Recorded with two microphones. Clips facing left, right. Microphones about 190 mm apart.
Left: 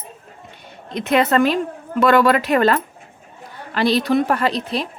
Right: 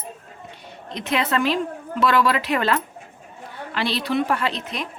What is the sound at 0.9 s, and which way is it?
A woman's voice, 50° left (ahead or behind).